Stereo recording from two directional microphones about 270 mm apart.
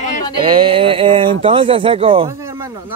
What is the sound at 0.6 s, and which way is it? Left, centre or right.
Speech, centre.